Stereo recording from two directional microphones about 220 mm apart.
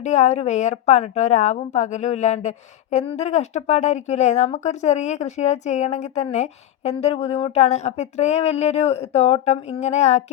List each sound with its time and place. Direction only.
0.0 s speech: 30° left (ahead or behind)